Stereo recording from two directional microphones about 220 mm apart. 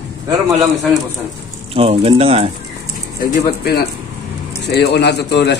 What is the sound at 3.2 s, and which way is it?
A man's voice, 45° left (ahead or behind).